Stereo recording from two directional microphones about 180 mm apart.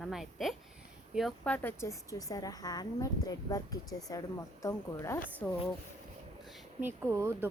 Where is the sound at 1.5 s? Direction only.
15° left (ahead or behind).